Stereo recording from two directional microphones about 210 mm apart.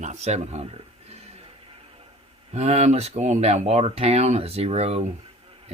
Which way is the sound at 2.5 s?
30° right (ahead or behind).